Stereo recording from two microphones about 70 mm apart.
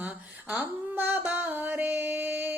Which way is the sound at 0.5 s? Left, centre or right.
Right.